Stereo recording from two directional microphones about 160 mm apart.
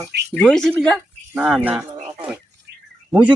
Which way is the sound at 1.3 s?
10° right (ahead or behind).